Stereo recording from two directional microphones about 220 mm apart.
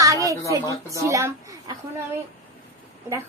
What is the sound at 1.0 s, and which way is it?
Speech, 15° right (ahead or behind).